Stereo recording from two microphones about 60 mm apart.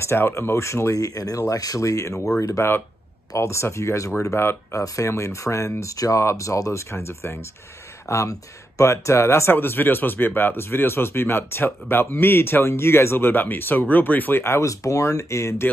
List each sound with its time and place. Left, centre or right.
0.0 s speech: left
4.2 s speech: left
4.8 s speech: left
8.1 s speech: left
14.6 s speech: left